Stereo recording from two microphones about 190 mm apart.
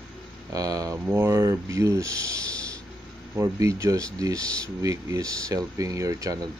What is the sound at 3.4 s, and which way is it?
Speech, 15° right (ahead or behind).